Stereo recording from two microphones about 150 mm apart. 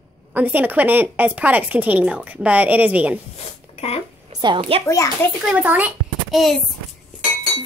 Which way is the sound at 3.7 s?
45° left (ahead or behind).